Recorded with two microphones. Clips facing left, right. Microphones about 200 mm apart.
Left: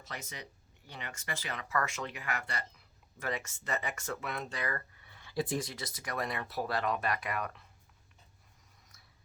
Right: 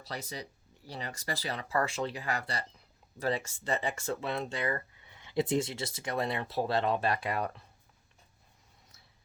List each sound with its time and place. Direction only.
0.0 s speech: 35° right (ahead or behind)